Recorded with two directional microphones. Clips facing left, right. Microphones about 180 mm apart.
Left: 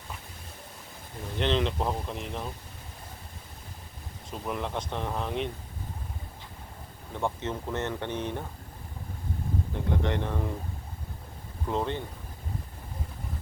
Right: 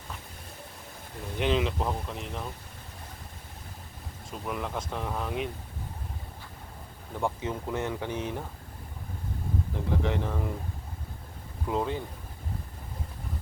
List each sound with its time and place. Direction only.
1.4 s speech: 5° right (ahead or behind)
4.3 s speech: centre (ahead or behind)
7.1 s speech: 5° right (ahead or behind)
9.7 s speech: centre (ahead or behind)
11.7 s speech: 5° right (ahead or behind)